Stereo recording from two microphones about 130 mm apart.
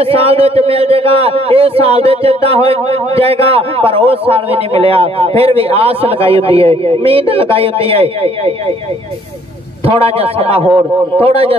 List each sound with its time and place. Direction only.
0.0 s a man's voice: 45° right (ahead or behind)
9.8 s a man's voice: 45° right (ahead or behind)